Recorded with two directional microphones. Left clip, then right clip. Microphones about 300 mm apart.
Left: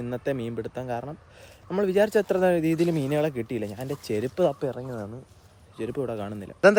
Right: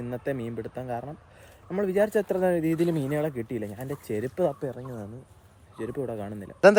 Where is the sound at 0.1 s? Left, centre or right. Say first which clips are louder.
Left 2 dB; centre.